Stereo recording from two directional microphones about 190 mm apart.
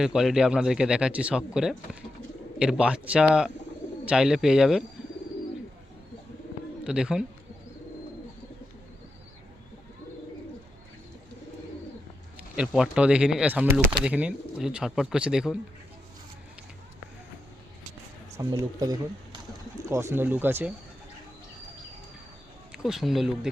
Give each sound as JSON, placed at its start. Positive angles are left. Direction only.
{"t": 0.0, "sound": "speech", "side_deg": 0}
{"t": 6.8, "sound": "speech", "side_deg": -5}
{"t": 12.5, "sound": "speech", "side_deg": -5}
{"t": 18.3, "sound": "speech", "side_deg": -15}
{"t": 22.7, "sound": "speech", "side_deg": 0}